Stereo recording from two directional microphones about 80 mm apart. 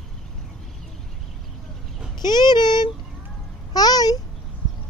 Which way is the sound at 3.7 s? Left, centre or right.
Left.